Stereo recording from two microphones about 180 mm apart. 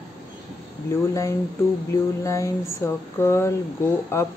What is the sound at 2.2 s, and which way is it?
Speech, 15° left (ahead or behind).